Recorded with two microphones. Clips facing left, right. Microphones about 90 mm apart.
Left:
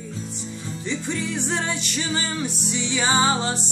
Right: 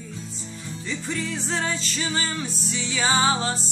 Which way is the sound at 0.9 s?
20° left (ahead or behind).